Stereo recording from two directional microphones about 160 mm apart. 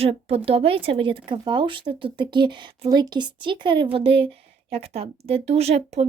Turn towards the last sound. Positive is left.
turn(degrees=-40)  # may be behind; listen again after turning